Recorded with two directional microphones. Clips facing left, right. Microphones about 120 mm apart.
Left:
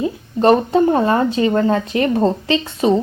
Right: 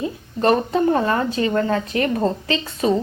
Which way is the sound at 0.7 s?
25° left (ahead or behind).